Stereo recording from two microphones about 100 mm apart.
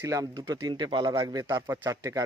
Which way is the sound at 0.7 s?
55° right (ahead or behind).